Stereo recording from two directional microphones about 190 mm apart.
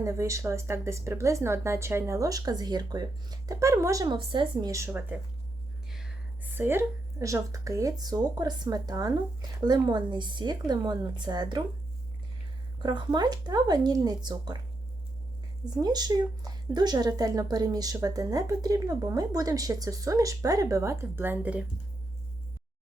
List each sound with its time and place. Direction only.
0.0 s a woman's voice: 15° right (ahead or behind)
12.8 s speech: 25° right (ahead or behind)
15.8 s speech: 20° right (ahead or behind)